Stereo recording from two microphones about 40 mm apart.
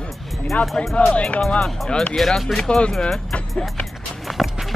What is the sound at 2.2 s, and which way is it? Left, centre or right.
Speech, centre.